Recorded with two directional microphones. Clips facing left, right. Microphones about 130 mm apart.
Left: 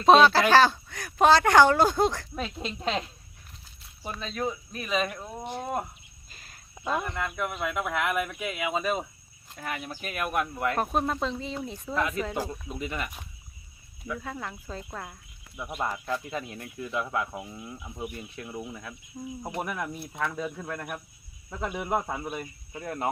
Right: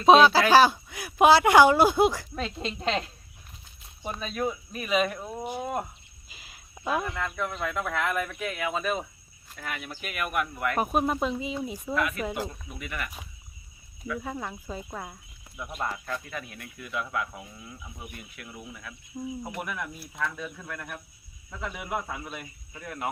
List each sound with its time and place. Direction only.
0.0 s speech: 5° right (ahead or behind)
2.3 s speech: 5° left (ahead or behind)
4.2 s speech: 5° right (ahead or behind)
6.2 s cricket: 5° right (ahead or behind)
7.2 s speech: 10° left (ahead or behind); by 10.8 s 25° left (ahead or behind)
10.8 s speech: 10° right (ahead or behind)
11.9 s speech: 25° left (ahead or behind)
14.2 s speech: 10° right (ahead or behind)
15.5 s speech: 15° left (ahead or behind); by 23.0 s 30° left (ahead or behind)